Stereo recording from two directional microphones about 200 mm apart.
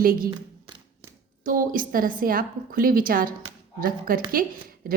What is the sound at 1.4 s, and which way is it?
A woman's voice, 45° right (ahead or behind).